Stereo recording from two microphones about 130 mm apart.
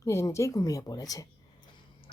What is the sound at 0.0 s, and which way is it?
Speech, 20° left (ahead or behind).